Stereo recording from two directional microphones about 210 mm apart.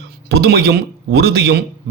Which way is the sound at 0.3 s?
50° right (ahead or behind).